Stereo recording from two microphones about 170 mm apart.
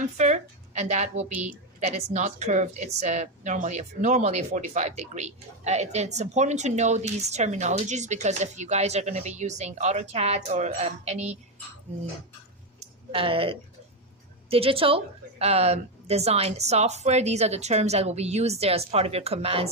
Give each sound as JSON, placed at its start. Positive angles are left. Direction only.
{"t": 0.2, "sound": "a woman's voice", "side_deg": -45}
{"t": 12.8, "sound": "a sound", "side_deg": -30}
{"t": 14.5, "sound": "a woman's voice", "side_deg": -35}